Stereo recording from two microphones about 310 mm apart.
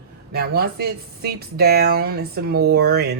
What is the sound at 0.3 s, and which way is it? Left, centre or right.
Speech, right.